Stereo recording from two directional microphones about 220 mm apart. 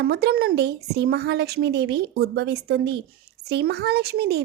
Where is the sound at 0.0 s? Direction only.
45° right (ahead or behind).